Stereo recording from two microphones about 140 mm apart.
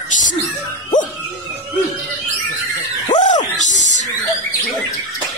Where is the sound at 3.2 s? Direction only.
60° left (ahead or behind).